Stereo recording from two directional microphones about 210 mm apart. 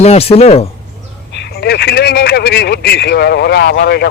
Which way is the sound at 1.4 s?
50° left (ahead or behind).